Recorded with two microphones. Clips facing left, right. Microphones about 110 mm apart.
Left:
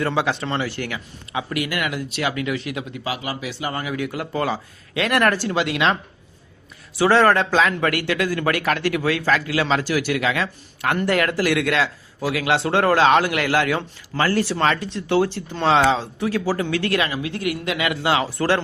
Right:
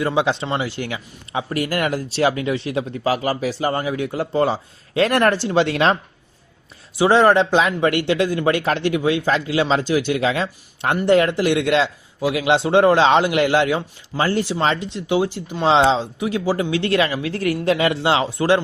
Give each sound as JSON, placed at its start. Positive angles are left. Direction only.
{"t": 0.0, "sound": "a man's voice", "side_deg": -15}
{"t": 5.6, "sound": "speech", "side_deg": -35}
{"t": 6.9, "sound": "a man's voice", "side_deg": -20}